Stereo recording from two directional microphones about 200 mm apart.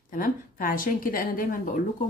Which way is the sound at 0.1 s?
45° left (ahead or behind).